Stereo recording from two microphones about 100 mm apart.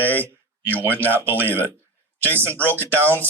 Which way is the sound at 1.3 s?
20° right (ahead or behind).